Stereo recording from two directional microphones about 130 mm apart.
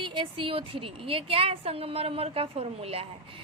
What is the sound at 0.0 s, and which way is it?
A woman's voice, 40° right (ahead or behind).